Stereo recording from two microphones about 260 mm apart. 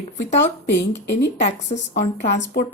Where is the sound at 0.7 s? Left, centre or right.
Left.